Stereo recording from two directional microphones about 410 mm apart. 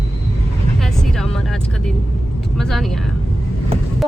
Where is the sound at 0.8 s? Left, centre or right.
Centre.